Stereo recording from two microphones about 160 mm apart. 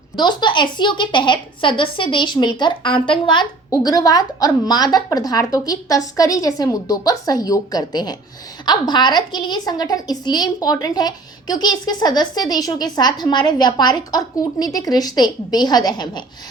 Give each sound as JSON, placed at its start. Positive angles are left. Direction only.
{"t": 0.2, "sound": "a woman's voice", "side_deg": 30}